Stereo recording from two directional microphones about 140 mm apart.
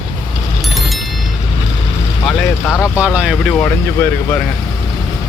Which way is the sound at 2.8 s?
10° right (ahead or behind).